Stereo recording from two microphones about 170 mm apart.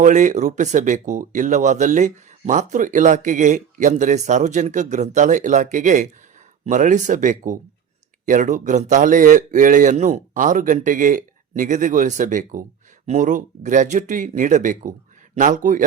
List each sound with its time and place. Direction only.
0.0 s speech: 45° right (ahead or behind)